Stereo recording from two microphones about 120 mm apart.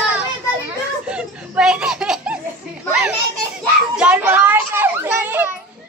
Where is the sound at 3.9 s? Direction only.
10° right (ahead or behind).